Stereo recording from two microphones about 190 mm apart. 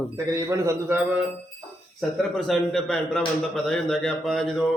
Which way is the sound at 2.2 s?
Centre (ahead or behind).